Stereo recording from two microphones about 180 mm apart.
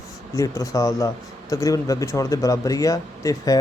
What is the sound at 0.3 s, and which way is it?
Speech, 20° left (ahead or behind).